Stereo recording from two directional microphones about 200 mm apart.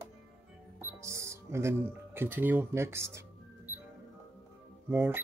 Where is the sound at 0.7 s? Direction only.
15° right (ahead or behind).